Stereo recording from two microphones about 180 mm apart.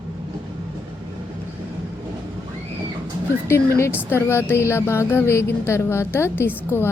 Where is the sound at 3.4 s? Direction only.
15° left (ahead or behind).